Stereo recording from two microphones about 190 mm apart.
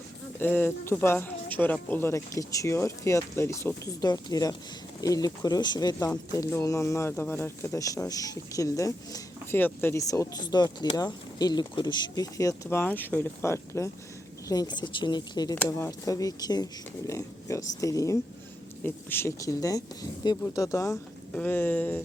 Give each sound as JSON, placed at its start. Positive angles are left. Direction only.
{"t": 0.3, "sound": "speech", "side_deg": 10}